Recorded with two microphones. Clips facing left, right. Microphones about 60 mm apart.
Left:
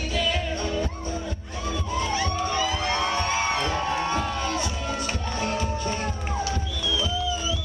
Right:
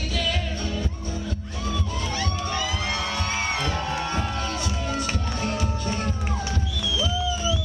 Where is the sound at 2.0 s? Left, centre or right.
Centre.